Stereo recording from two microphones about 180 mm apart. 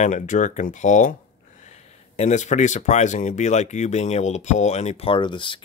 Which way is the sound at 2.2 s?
40° left (ahead or behind).